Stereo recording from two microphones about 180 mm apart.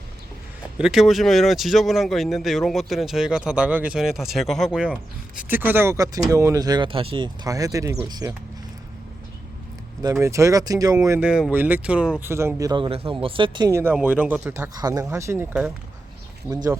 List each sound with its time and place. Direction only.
0.8 s speech: centre (ahead or behind); by 8.4 s 20° right (ahead or behind)
10.0 s speech: 15° right (ahead or behind)
16.5 s speech: 5° right (ahead or behind)